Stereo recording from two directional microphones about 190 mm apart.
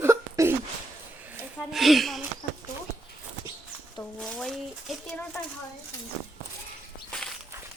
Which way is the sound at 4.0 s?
5° left (ahead or behind).